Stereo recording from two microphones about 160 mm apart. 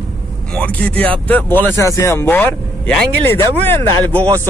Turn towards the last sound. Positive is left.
turn(degrees=10)  # may be behind; listen again after turning